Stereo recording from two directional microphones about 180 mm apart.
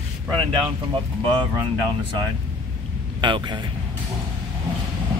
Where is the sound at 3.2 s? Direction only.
25° right (ahead or behind).